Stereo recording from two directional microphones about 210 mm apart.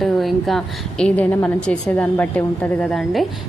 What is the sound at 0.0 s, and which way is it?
A woman's voice, centre (ahead or behind).